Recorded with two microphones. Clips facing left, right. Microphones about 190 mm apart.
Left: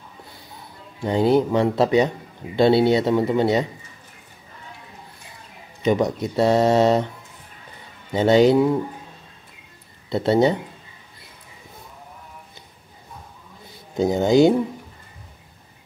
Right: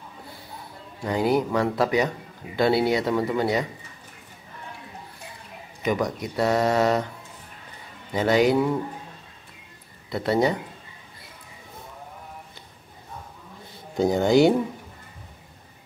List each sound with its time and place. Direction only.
1.0 s speech: 25° left (ahead or behind)
5.9 s speech: 25° left (ahead or behind)
8.1 s speech: 25° left (ahead or behind)
10.0 s speech: 25° left (ahead or behind)
13.9 s speech: 20° left (ahead or behind)